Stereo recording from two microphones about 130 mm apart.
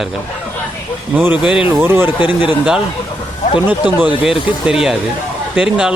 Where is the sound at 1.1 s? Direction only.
10° right (ahead or behind).